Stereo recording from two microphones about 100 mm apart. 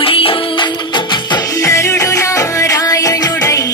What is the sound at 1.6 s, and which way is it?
Music, 30° left (ahead or behind).